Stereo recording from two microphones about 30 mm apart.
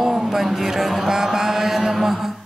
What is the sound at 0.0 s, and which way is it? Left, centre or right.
Mantra, centre.